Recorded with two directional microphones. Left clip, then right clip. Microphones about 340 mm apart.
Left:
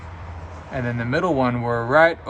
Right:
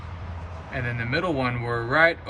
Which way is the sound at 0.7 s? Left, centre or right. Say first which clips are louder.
Left 3 dB; centre.